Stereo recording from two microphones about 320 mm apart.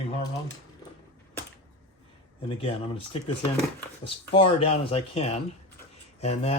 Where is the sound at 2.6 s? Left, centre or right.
Centre.